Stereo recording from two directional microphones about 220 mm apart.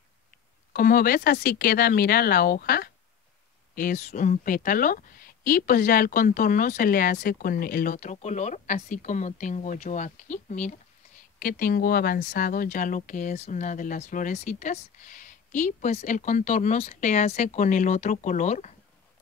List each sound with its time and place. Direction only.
0.7 s speech: 40° left (ahead or behind)